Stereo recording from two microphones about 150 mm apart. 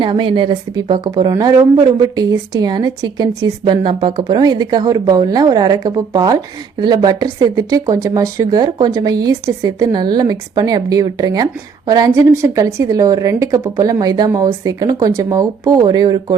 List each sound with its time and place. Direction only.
0.0 s a woman's voice: 35° right (ahead or behind)